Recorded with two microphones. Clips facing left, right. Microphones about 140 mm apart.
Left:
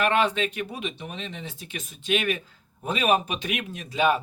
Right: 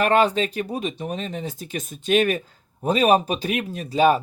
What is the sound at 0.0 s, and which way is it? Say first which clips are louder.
Speech: right 4 dB; 40° right (ahead or behind).